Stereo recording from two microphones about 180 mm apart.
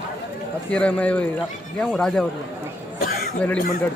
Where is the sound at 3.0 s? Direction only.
50° left (ahead or behind).